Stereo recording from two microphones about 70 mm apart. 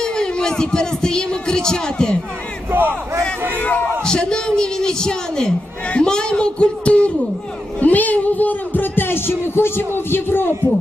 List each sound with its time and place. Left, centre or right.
0.0 s speech: centre
2.6 s speech: right
3.6 s speech: left
4.0 s a man's voice: centre; by 10.5 s left